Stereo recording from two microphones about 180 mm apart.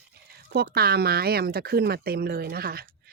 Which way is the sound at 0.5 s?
60° right (ahead or behind).